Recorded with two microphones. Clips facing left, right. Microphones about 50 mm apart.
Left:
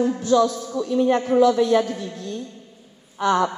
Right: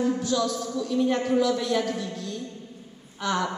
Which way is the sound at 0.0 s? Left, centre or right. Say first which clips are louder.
Left 6 dB; centre.